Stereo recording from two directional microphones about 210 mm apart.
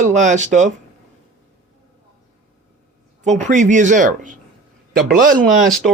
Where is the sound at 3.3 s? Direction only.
35° right (ahead or behind).